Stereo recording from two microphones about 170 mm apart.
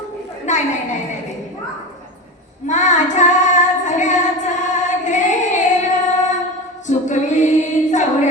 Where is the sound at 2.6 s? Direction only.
45° left (ahead or behind).